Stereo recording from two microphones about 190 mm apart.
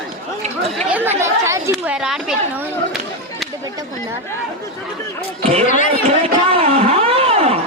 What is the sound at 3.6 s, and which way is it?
Speech, 20° right (ahead or behind).